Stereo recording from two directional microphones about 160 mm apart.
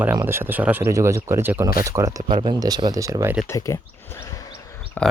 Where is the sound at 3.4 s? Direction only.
20° left (ahead or behind).